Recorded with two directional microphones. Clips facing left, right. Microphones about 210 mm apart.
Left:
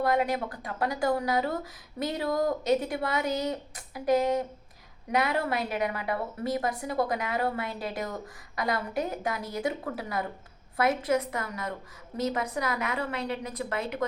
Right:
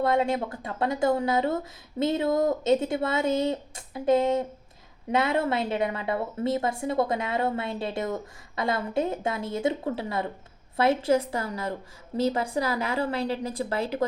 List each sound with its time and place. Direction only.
0.0 s a woman's voice: 25° right (ahead or behind)